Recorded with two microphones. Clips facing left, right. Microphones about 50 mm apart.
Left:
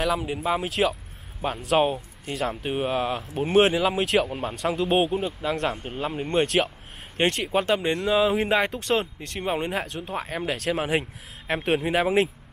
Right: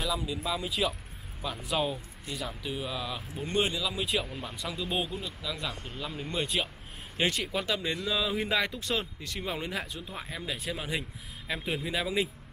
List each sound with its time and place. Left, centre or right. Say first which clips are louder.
0.0 s speech: left 7 dB; left
0.6 s speech: left 5 dB; left
1.4 s speech: left 9 dB; left
3.4 s speech: left 10 dB; left
3.7 s speech: left 9 dB; left
4.3 s speech: left 10 dB; left
7.2 s speech: left 7 dB; left
8.7 s speech: left 8 dB; left
10.6 s speech: left 12 dB; left